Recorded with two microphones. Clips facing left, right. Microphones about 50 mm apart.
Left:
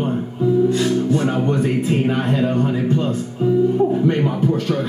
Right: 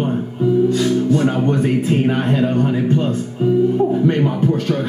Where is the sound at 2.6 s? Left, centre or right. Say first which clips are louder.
Right 2 dB; right.